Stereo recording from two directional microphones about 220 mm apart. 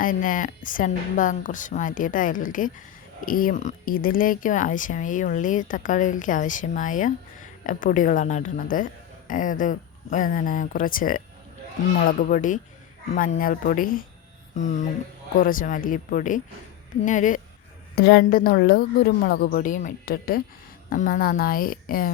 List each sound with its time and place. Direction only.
0.0 s speech: 35° left (ahead or behind)
17.9 s a woman's voice: 50° left (ahead or behind)